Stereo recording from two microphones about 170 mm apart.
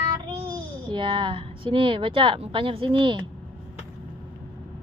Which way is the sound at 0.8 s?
25° right (ahead or behind).